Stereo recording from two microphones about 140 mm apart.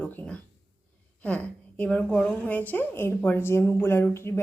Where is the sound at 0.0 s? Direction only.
10° left (ahead or behind).